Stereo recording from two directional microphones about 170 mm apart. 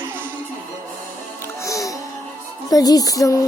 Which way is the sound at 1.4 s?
20° left (ahead or behind).